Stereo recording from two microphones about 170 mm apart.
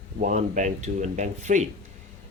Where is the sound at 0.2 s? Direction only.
45° right (ahead or behind).